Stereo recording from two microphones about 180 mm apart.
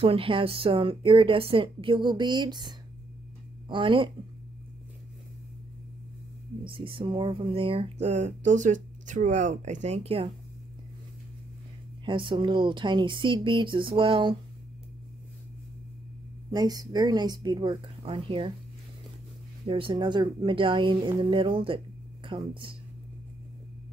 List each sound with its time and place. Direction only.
0.0 s speech: 30° right (ahead or behind)
6.6 s speech: 30° right (ahead or behind)
12.0 s speech: 25° right (ahead or behind)
16.5 s speech: 20° right (ahead or behind)
19.6 s speech: 30° right (ahead or behind)